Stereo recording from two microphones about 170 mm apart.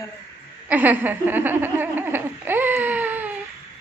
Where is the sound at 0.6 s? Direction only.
10° right (ahead or behind).